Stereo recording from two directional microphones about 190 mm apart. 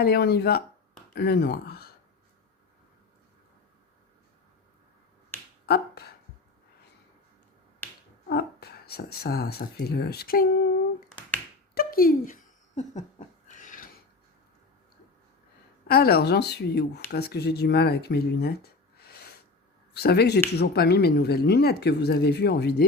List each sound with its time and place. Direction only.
0.0 s speech: 55° left (ahead or behind)
5.6 s finger snapping: 55° left (ahead or behind)
7.8 s finger snapping: 10° left (ahead or behind)
8.3 s speech: 55° left (ahead or behind)
11.7 s a sound: 50° left (ahead or behind)
15.9 s speech: 55° left (ahead or behind)